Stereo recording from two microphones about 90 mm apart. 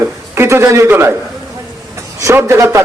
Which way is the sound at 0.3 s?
30° right (ahead or behind).